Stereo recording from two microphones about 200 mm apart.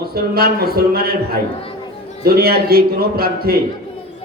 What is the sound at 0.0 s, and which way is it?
A man's voice, 50° right (ahead or behind).